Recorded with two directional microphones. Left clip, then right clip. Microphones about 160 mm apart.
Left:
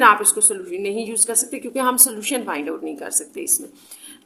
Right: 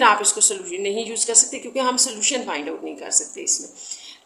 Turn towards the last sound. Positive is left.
turn(degrees=40)  # may be behind; listen again after turning